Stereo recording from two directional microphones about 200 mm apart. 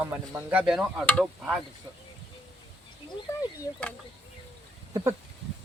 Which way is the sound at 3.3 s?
15° left (ahead or behind).